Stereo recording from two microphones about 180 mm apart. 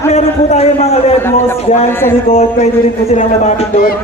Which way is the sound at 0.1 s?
35° left (ahead or behind).